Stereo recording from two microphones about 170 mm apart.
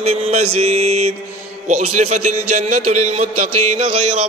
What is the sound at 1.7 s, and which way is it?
A man's voice, 45° right (ahead or behind).